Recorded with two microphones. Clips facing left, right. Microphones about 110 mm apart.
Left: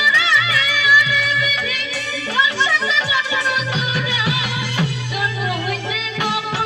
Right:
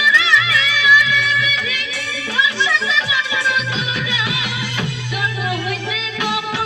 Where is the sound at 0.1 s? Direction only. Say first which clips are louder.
Right 1 dB; 40° left (ahead or behind).